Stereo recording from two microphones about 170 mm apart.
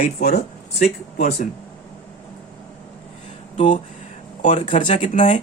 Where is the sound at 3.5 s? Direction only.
45° left (ahead or behind).